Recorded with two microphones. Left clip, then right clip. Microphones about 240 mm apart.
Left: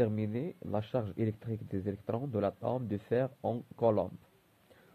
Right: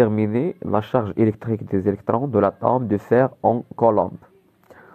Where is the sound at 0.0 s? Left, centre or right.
Centre.